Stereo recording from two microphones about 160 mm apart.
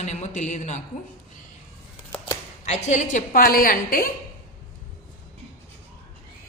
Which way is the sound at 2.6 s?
45° left (ahead or behind).